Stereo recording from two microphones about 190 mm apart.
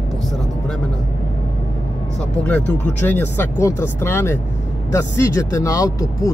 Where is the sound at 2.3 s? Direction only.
5° left (ahead or behind).